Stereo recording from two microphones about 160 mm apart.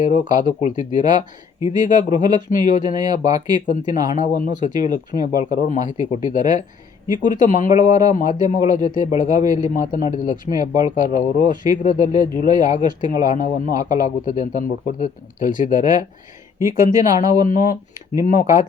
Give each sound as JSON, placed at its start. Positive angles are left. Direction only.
{"t": 0.0, "sound": "speech", "side_deg": 55}
{"t": 2.9, "sound": "speech", "side_deg": -25}
{"t": 3.5, "sound": "speech", "side_deg": 55}
{"t": 16.6, "sound": "speech", "side_deg": -20}
{"t": 17.4, "sound": "speech", "side_deg": 55}